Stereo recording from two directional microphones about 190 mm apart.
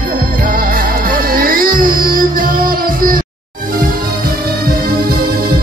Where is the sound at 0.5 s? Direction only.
50° right (ahead or behind).